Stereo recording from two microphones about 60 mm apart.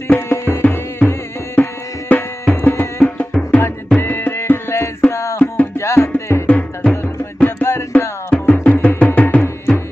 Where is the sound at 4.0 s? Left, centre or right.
Left.